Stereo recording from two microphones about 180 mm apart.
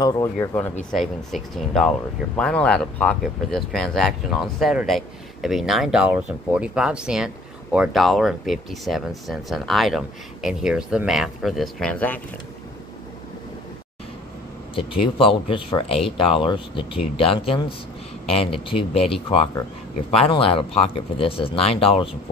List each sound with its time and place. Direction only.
0.0 s speech: 15° left (ahead or behind)
0.9 s speech: centre (ahead or behind)
14.8 s speech: 30° left (ahead or behind)
20.1 s speech: 30° left (ahead or behind)